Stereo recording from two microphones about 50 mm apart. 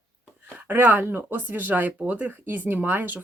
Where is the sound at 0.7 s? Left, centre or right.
Right.